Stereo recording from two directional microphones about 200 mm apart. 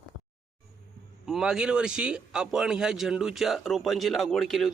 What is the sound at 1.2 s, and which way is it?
A man's voice, 5° right (ahead or behind).